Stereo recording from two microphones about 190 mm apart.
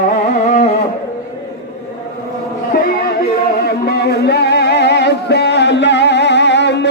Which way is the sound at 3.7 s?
60° left (ahead or behind).